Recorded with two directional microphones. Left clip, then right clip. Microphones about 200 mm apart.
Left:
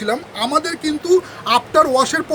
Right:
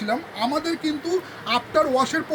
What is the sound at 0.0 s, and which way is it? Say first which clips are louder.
Speech: left 4 dB; 60° left (ahead or behind).